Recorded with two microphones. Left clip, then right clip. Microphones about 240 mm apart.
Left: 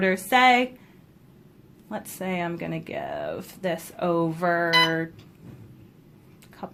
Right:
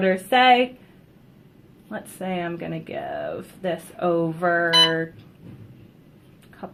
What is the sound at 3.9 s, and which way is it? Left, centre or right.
Speech, left.